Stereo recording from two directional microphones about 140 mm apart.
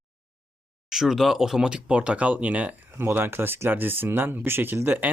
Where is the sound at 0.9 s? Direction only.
5° right (ahead or behind).